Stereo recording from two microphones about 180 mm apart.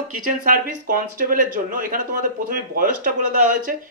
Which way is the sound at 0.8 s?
50° right (ahead or behind).